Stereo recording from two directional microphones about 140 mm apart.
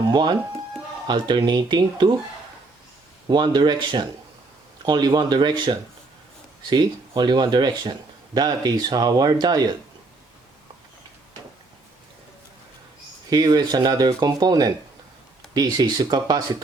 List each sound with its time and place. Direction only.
0.0 s speech: 30° right (ahead or behind)
3.2 s speech: 30° right (ahead or behind)
13.3 s speech: 25° right (ahead or behind)